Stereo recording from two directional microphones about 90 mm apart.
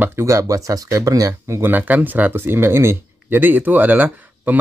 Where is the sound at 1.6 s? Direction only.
20° right (ahead or behind).